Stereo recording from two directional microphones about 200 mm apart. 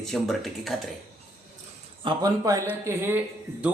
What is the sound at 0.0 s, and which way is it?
Speech, centre (ahead or behind).